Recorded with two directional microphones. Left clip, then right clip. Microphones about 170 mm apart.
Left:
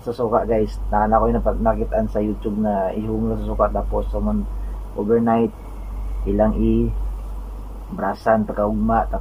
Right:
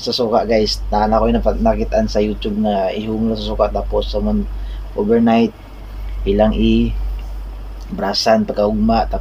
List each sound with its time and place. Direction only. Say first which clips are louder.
0.0 s speech: right 4 dB; 20° right (ahead or behind)
8.0 s speech: right 4 dB; 30° right (ahead or behind)